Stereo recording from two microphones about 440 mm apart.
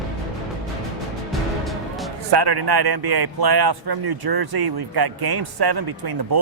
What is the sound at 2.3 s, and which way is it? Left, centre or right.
A man's voice, right.